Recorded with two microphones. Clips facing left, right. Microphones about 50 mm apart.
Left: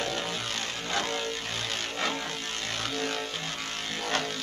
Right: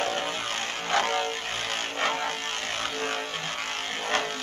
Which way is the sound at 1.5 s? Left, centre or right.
Right.